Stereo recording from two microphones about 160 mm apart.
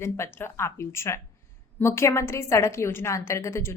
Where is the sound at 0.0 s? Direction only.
15° left (ahead or behind).